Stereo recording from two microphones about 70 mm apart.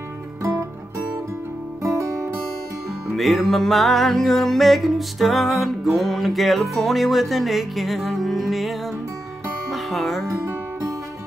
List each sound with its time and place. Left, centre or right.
0.4 s music: right
3.2 s music: centre
10.2 s music: right